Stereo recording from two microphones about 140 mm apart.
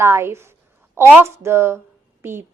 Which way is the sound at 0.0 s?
20° right (ahead or behind).